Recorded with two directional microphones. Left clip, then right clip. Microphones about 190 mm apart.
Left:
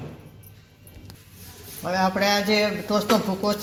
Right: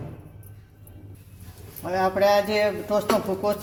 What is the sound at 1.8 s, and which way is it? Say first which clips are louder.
A man's voice: right 1 dB; 20° left (ahead or behind).